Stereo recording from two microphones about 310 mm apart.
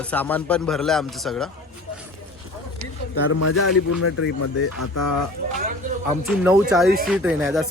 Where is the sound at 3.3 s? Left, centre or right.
Left.